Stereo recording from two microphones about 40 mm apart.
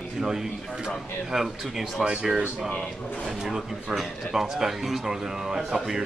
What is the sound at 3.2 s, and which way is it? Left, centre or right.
Speech, centre.